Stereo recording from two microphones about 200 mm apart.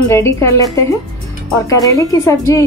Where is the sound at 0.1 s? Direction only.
15° left (ahead or behind).